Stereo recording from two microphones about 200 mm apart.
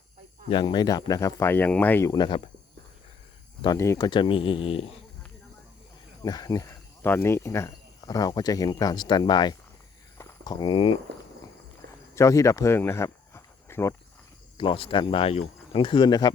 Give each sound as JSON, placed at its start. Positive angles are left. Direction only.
{"t": 0.5, "sound": "speech", "side_deg": 20}
{"t": 3.6, "sound": "speech", "side_deg": 15}
{"t": 6.2, "sound": "speech", "side_deg": 20}
{"t": 12.1, "sound": "speech", "side_deg": 15}
{"t": 14.6, "sound": "speech", "side_deg": 25}